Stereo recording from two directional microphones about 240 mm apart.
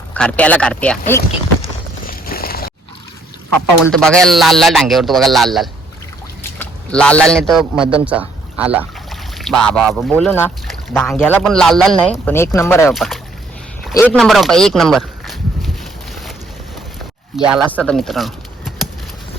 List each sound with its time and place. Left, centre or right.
0.1 s speech: centre
2.0 s clip-clop: left
3.9 s speech: centre
6.6 s a sound: centre
7.3 s speech: centre
12.9 s speech: centre
13.9 s a sound: centre
17.3 s speech: centre